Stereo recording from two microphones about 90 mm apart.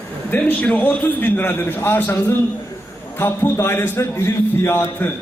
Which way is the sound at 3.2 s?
30° left (ahead or behind).